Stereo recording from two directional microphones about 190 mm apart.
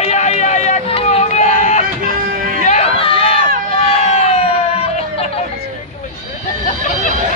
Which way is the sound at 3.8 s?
35° left (ahead or behind).